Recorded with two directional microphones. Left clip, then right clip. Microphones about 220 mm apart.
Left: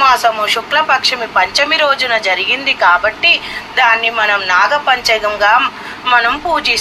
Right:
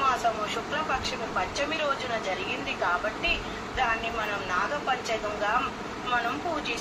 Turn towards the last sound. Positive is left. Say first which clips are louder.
# left 16 dB
turn(degrees=45)  # may be behind; listen again after turning